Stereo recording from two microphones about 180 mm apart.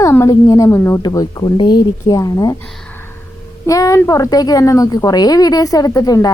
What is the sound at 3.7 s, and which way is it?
A woman's voice, 20° left (ahead or behind).